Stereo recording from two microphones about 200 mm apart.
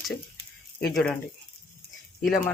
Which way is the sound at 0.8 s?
5° left (ahead or behind).